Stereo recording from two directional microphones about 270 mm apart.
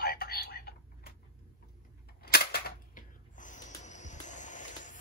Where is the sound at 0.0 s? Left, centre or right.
Left.